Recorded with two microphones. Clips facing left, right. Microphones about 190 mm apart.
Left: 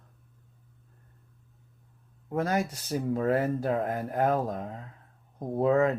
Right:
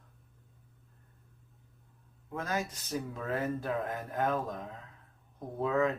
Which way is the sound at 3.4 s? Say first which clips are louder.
Left 5 dB; 35° left (ahead or behind).